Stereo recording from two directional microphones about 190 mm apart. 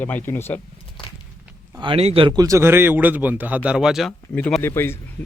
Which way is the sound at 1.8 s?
30° right (ahead or behind).